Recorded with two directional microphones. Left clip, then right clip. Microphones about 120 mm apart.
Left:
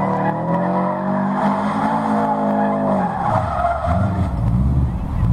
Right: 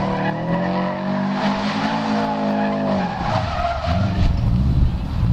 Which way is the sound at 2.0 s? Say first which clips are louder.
Left 3 dB; centre (ahead or behind).